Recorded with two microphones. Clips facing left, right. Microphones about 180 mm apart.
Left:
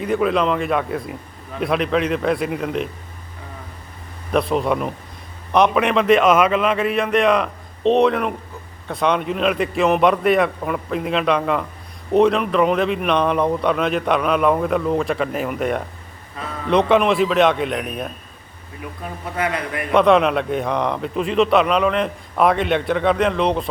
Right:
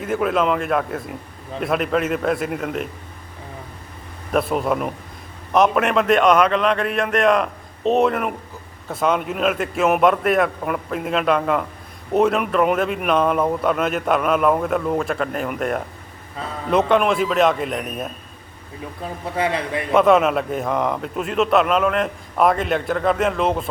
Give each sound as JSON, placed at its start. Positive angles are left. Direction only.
{"t": 0.0, "sound": "a man's voice", "side_deg": 0}
{"t": 4.3, "sound": "a man's voice", "side_deg": -5}
{"t": 19.4, "sound": "a man's voice", "side_deg": -30}
{"t": 19.9, "sound": "a man's voice", "side_deg": -5}